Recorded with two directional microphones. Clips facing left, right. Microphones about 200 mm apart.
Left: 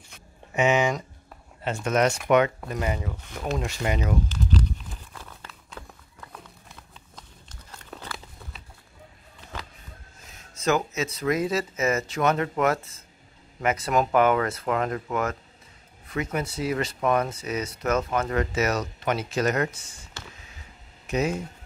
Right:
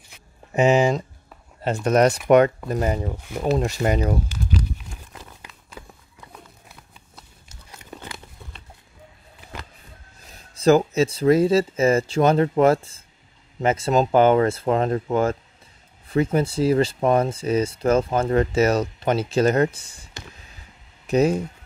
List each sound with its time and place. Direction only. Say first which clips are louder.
0.5 s speech: right 5 dB; 35° right (ahead or behind)
4.5 s horse: even; 10° right (ahead or behind)
4.9 s crumpling: right 1 dB; 10° right (ahead or behind)
5.5 s horse: right 1 dB; 10° right (ahead or behind)
6.3 s a sound: right 2 dB; 5° right (ahead or behind)
10.2 s speech: right 8 dB; 35° right (ahead or behind)
21.1 s speech: right 7 dB; 35° right (ahead or behind)